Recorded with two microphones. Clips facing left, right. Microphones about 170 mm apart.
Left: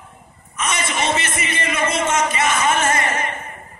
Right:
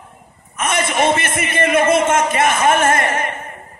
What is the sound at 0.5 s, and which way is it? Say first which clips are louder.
A man's voice: right 5 dB; 55° right (ahead or behind).